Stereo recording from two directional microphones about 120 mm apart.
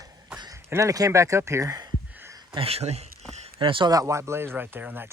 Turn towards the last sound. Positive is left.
turn(degrees=-15)  # may be behind; listen again after turning